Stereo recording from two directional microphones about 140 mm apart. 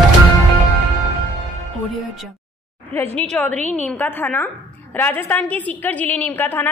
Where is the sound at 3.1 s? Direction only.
5° left (ahead or behind).